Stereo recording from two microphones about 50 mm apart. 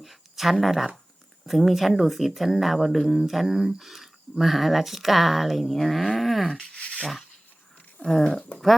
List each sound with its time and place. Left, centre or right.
0.0 s a sound: centre
1.5 s speech: centre
6.5 s speech: centre
8.0 s speech: centre